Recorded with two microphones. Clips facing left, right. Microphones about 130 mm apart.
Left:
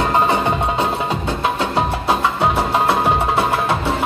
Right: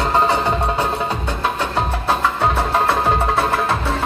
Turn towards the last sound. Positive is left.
turn(degrees=15)  # may be behind; listen again after turning